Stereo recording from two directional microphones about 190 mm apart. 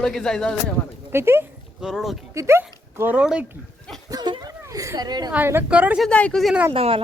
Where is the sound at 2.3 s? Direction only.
15° right (ahead or behind).